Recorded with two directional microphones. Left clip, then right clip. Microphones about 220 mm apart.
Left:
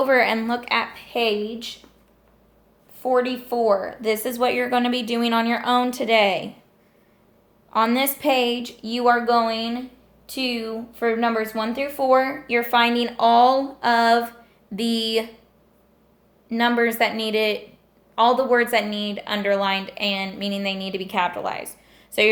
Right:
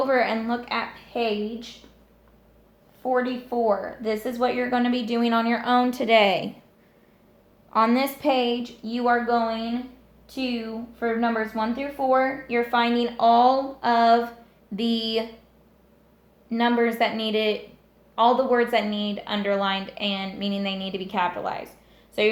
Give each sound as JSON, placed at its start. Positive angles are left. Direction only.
{"t": 0.0, "sound": "a woman's voice", "side_deg": 30}
{"t": 3.0, "sound": "a woman's voice", "side_deg": 40}
{"t": 7.7, "sound": "a woman's voice", "side_deg": 10}
{"t": 16.5, "sound": "a woman's voice", "side_deg": 25}